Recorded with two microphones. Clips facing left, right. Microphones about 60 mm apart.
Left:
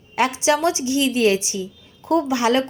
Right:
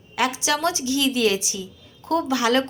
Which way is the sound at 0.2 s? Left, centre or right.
Left.